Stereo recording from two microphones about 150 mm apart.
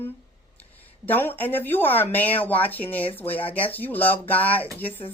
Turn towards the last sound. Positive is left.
turn(degrees=10)  # may be behind; listen again after turning